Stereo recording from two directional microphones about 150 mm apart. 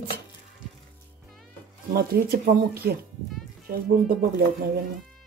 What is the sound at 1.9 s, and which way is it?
Speech, 75° right (ahead or behind).